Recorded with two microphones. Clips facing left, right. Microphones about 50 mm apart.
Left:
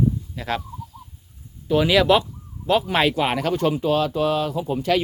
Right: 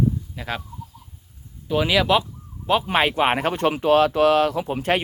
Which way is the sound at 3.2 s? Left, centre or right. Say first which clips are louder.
Right 1 dB; right.